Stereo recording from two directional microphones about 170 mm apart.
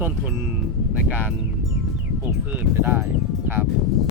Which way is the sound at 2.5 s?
10° right (ahead or behind).